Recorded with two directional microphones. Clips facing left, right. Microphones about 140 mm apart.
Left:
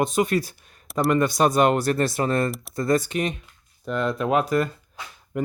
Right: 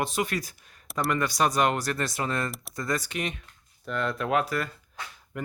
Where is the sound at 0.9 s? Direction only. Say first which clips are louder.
Left 6 dB; centre (ahead or behind).